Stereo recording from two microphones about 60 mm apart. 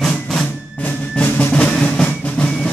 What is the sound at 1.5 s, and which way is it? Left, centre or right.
Drum, centre.